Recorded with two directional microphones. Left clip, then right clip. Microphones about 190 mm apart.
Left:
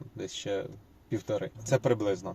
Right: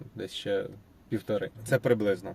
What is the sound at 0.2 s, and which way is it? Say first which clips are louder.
Speech: right 3 dB; 15° right (ahead or behind).